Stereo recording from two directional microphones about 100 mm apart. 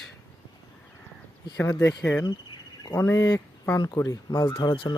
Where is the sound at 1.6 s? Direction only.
25° left (ahead or behind).